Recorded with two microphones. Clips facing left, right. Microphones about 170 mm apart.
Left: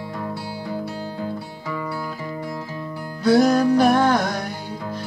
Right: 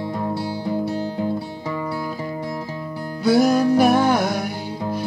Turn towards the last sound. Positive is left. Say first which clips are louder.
# right 1 dB
turn(degrees=-10)  # may be behind; listen again after turning